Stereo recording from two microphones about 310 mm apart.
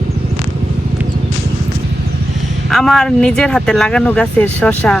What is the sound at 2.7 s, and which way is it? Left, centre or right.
Speech, centre.